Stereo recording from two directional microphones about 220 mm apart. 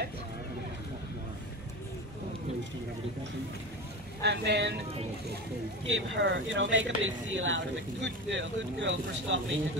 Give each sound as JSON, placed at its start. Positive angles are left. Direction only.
{"t": 4.2, "sound": "speech", "side_deg": -50}
{"t": 5.9, "sound": "speech", "side_deg": -55}